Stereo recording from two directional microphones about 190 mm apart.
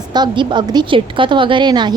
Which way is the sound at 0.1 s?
25° right (ahead or behind).